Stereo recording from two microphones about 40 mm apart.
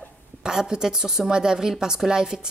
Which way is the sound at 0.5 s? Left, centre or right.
Centre.